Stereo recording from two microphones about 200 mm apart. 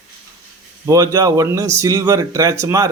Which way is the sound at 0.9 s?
15° right (ahead or behind).